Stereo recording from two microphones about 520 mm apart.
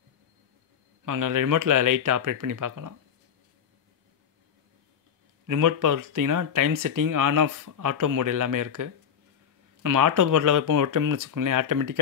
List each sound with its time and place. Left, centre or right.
1.0 s speech: right
5.5 s speech: right